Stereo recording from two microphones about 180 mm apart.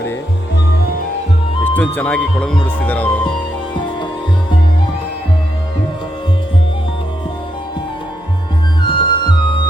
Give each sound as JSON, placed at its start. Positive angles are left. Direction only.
{"t": 1.6, "sound": "speech", "side_deg": 10}
{"t": 8.9, "sound": "music", "side_deg": 25}